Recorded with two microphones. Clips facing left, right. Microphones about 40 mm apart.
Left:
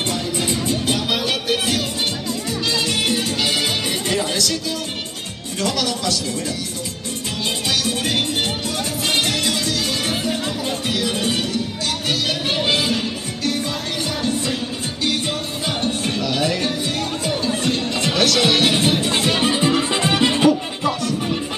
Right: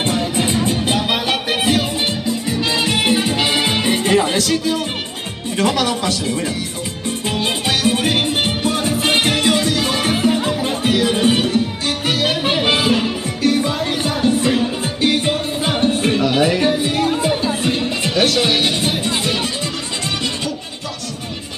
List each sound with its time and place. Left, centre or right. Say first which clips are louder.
0.0 s music: right 4 dB; right
5.6 s speech: right 5 dB; right
7.8 s music: right 5 dB; right
18.2 s speech: even; centre
19.4 s music: left 6 dB; left